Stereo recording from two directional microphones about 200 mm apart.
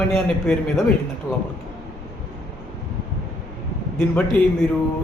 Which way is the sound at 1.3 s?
15° left (ahead or behind).